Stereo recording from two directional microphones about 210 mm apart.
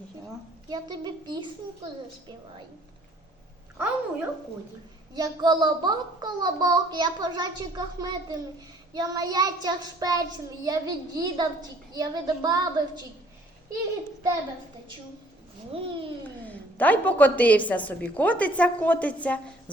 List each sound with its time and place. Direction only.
0.7 s a child's voice: 20° right (ahead or behind)
3.8 s child singing: 10° right (ahead or behind)
5.1 s a child's voice: 20° right (ahead or behind)
8.9 s child singing: 15° right (ahead or behind)
15.7 s a child's voice: 25° right (ahead or behind)
16.5 s a woman's voice: 10° left (ahead or behind)